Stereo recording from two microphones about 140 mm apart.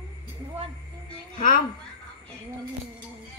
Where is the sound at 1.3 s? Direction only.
75° left (ahead or behind).